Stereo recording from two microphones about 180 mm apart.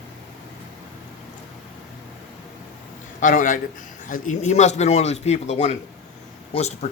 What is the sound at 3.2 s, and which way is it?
Speech, 50° left (ahead or behind).